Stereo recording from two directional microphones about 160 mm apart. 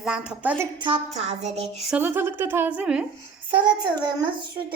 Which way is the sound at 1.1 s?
45° right (ahead or behind).